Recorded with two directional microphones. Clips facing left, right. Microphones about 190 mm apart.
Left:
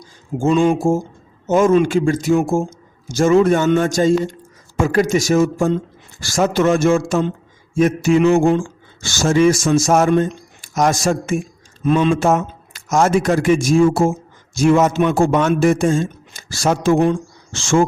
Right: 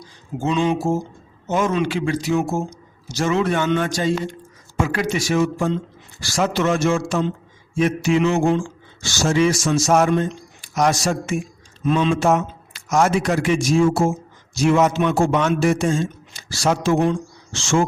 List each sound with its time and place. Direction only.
0.0 s speech: 45° left (ahead or behind)